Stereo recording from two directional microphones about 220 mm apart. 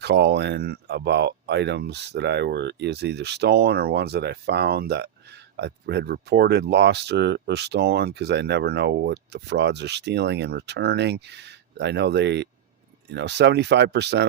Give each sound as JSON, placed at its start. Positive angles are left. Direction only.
{"t": 0.0, "sound": "speech", "side_deg": -50}